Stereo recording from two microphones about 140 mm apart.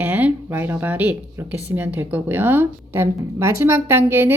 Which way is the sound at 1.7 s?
15° right (ahead or behind).